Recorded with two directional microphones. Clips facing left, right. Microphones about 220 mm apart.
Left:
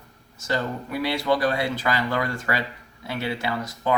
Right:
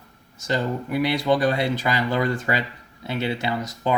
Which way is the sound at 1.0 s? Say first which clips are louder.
Right 2 dB; 20° right (ahead or behind).